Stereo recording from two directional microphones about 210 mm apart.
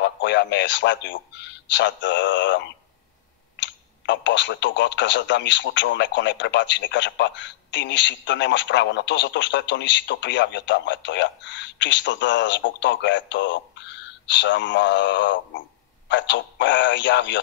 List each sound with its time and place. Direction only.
0.0 s a man's voice: 60° left (ahead or behind)